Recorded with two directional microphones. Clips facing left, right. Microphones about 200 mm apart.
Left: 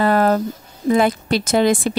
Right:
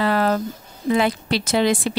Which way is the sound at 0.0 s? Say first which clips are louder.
Left 4 dB; 45° left (ahead or behind).